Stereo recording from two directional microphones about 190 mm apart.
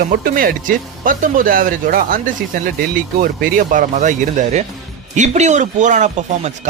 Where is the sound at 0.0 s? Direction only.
50° right (ahead or behind).